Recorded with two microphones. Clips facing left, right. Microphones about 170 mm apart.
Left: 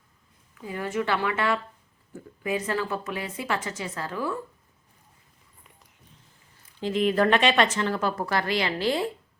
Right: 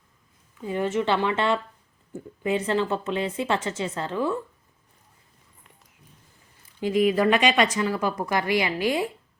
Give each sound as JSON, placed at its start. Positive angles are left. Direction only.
{"t": 0.6, "sound": "a woman's voice", "side_deg": -25}
{"t": 6.7, "sound": "speech", "side_deg": -10}